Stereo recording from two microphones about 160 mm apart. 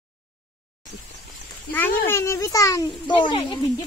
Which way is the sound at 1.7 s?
15° left (ahead or behind).